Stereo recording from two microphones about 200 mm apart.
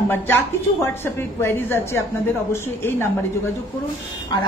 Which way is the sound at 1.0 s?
10° left (ahead or behind).